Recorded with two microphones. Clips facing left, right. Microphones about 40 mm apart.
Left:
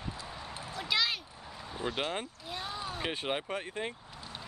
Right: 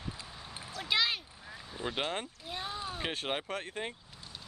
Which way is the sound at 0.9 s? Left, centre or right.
Centre.